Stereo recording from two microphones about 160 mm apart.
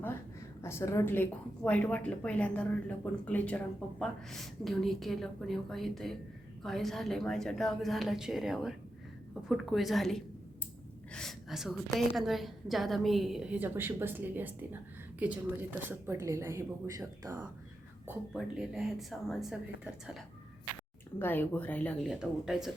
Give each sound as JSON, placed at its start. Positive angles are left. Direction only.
{"t": 0.6, "sound": "a woman's voice", "side_deg": 15}
{"t": 18.3, "sound": "a woman's voice", "side_deg": -5}
{"t": 21.2, "sound": "speech", "side_deg": 10}
{"t": 22.0, "sound": "a woman's voice", "side_deg": -5}